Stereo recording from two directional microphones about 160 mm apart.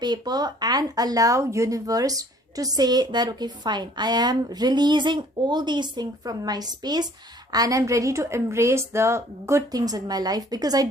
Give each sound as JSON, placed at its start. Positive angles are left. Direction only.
{"t": 0.0, "sound": "speech", "side_deg": -25}